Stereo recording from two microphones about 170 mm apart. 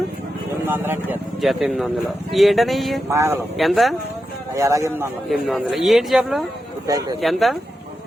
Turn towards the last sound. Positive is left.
turn(degrees=0)  # may be behind; listen again after turning